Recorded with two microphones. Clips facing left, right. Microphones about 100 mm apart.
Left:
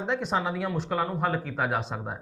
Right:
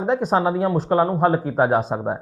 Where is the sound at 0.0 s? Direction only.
40° right (ahead or behind).